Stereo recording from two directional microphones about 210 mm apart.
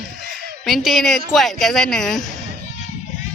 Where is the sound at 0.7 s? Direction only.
Centre (ahead or behind).